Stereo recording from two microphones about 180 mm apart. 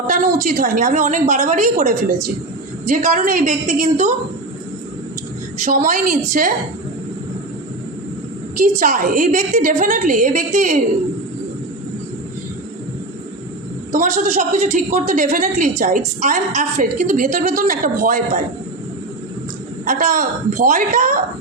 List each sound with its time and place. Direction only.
0.1 s a woman's voice: 50° right (ahead or behind)
5.7 s a woman's voice: 45° right (ahead or behind)
8.8 s a woman's voice: 45° right (ahead or behind)
13.9 s a woman's voice: 40° right (ahead or behind)
19.8 s a woman's voice: 45° right (ahead or behind)